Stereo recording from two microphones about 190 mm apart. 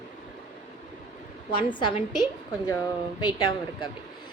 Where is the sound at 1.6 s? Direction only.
25° left (ahead or behind).